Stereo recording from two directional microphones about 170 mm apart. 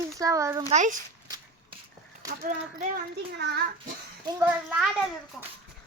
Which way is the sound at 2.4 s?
50° right (ahead or behind).